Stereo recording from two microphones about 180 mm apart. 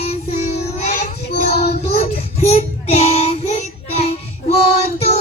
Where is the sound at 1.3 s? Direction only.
65° left (ahead or behind).